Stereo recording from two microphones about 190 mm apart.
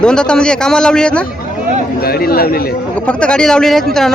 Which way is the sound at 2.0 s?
50° left (ahead or behind).